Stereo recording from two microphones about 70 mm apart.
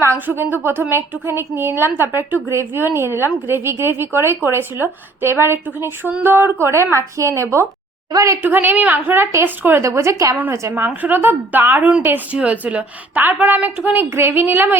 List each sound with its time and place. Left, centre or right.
0.0 s a woman's voice: right
8.4 s a woman's voice: right
10.7 s a woman's voice: right